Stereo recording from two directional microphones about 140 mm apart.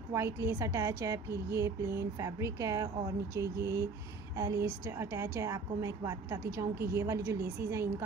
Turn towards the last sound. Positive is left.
turn(degrees=-20)  # may be behind; listen again after turning